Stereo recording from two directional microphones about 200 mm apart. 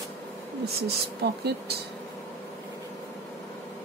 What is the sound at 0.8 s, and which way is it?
Speech, 55° right (ahead or behind).